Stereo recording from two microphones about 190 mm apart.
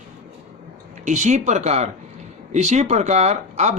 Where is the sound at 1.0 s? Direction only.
40° right (ahead or behind).